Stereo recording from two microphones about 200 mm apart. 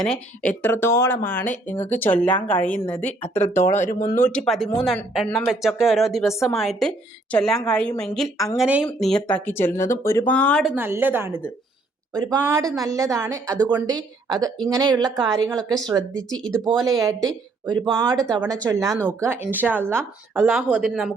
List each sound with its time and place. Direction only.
0.0 s speech: 5° left (ahead or behind)
3.7 s speech: 40° left (ahead or behind)
4.1 s a woman's voice: 10° left (ahead or behind); by 17.2 s 15° right (ahead or behind)
18.3 s a woman's voice: 20° right (ahead or behind); by 21.2 s centre (ahead or behind)